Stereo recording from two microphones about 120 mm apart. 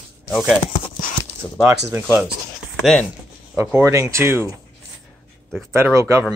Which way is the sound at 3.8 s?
25° right (ahead or behind).